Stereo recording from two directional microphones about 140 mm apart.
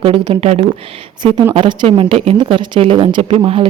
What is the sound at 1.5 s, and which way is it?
Speech, 35° right (ahead or behind).